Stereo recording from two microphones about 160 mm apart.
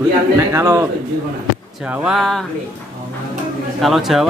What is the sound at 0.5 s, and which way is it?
Speech, 15° right (ahead or behind).